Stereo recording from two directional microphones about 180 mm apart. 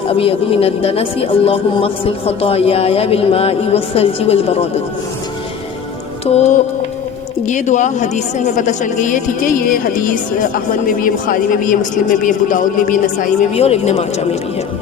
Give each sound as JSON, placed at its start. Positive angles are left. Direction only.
{"t": 0.1, "sound": "speech", "side_deg": 30}
{"t": 6.3, "sound": "a woman's voice", "side_deg": 35}